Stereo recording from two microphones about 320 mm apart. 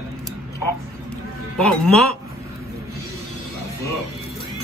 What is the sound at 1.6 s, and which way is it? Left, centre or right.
Speech, centre.